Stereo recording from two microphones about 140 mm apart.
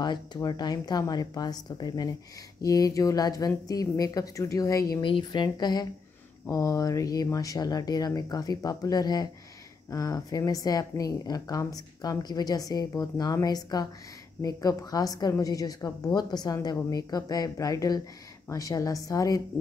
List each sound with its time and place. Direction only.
0.0 s speech: 30° left (ahead or behind)
5.0 s speech: 35° left (ahead or behind)